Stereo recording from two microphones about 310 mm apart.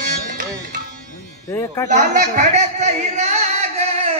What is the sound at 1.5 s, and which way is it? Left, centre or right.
Speech, centre.